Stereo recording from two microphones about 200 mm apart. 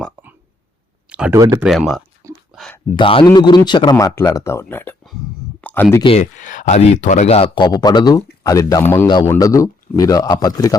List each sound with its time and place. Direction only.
1.1 s speech: 5° right (ahead or behind)
2.5 s a sound: centre (ahead or behind)
2.9 s a man's voice: 25° left (ahead or behind); by 6.0 s 10° left (ahead or behind)
6.0 s speech: 30° left (ahead or behind)